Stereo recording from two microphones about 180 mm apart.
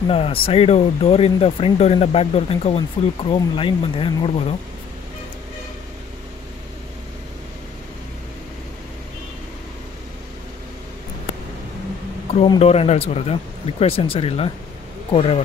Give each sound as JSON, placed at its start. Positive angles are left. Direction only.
{"t": 0.1, "sound": "speech", "side_deg": 30}
{"t": 12.4, "sound": "speech", "side_deg": 35}